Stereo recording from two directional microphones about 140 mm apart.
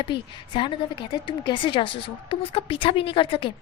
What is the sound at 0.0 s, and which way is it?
A woman's voice, 35° left (ahead or behind).